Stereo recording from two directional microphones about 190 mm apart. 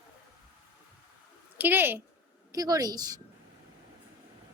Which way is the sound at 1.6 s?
10° right (ahead or behind).